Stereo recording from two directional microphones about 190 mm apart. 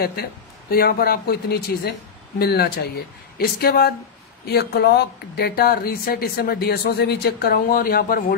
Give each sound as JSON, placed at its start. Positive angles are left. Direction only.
{"t": 0.0, "sound": "speech", "side_deg": 55}